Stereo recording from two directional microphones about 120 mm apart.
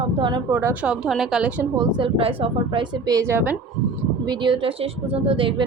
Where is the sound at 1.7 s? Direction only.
35° right (ahead or behind).